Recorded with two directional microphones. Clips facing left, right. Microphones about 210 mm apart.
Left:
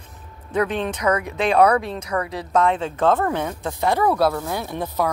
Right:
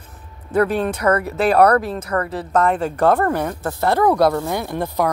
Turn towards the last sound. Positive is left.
turn(degrees=-15)  # may be behind; listen again after turning